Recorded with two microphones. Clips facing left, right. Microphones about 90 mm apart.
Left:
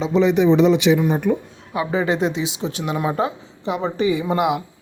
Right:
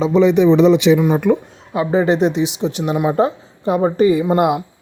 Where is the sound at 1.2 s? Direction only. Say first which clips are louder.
Right 6 dB; 90° right.